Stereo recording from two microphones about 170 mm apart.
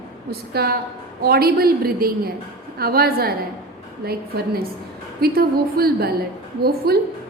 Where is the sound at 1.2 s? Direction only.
65° right (ahead or behind).